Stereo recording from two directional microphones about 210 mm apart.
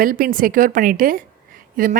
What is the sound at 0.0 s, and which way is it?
A woman's voice, 40° right (ahead or behind).